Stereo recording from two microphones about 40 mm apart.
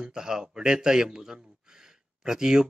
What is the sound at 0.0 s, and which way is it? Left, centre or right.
A man's voice, centre.